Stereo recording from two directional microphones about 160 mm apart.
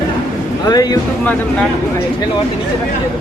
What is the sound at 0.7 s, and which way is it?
Speech, 25° left (ahead or behind).